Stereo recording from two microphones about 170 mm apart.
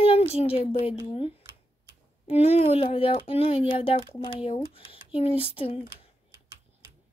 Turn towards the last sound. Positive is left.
turn(degrees=35)  # may be behind; listen again after turning